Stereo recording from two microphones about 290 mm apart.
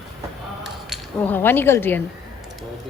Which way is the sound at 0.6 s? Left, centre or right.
Centre.